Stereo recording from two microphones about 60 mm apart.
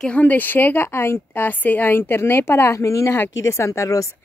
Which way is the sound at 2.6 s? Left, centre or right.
Left.